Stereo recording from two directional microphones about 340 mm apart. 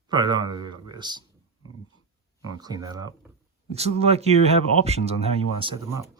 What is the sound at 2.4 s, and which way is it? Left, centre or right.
Speech, centre.